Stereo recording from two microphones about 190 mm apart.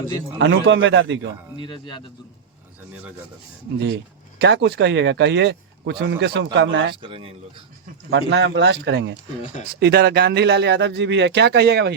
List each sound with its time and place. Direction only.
0.3 s speech: 65° right (ahead or behind)
1.5 s speech: 25° left (ahead or behind)
3.8 s speech: 65° right (ahead or behind)
6.9 s speech: 25° right (ahead or behind)
8.1 s speech: 65° right (ahead or behind)